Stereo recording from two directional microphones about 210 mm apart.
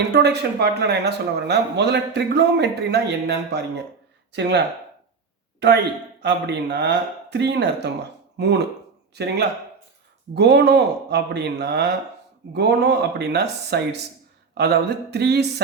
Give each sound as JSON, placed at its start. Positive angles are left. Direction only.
{"t": 0.1, "sound": "speech", "side_deg": -50}